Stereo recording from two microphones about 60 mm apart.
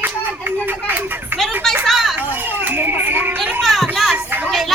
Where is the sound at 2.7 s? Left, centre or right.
Right.